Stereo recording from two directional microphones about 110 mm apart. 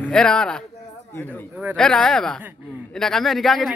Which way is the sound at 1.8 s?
5° left (ahead or behind).